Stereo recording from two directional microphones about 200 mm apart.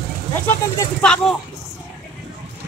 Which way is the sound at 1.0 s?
5° left (ahead or behind).